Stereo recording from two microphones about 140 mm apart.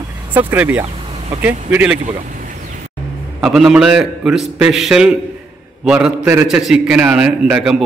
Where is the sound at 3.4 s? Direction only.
5° right (ahead or behind).